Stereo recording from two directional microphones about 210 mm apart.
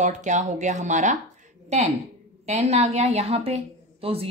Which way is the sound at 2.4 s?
30° right (ahead or behind).